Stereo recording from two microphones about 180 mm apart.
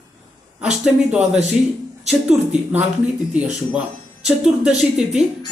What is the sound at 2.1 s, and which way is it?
Speech, 5° right (ahead or behind).